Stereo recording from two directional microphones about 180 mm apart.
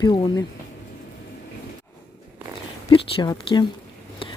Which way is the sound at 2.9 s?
25° left (ahead or behind).